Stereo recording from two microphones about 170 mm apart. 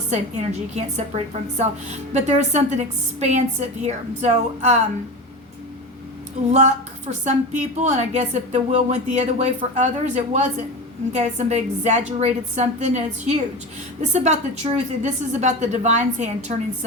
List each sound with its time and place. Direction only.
0.1 s a woman's voice: 45° right (ahead or behind)
7.1 s a woman's voice: 40° right (ahead or behind)